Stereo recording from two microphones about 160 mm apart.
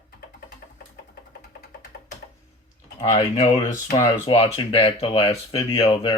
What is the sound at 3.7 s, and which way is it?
Speech, 20° left (ahead or behind).